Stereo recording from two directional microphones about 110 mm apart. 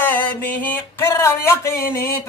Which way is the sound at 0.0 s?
20° left (ahead or behind).